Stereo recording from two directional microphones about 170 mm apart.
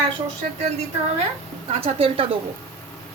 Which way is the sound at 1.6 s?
35° right (ahead or behind).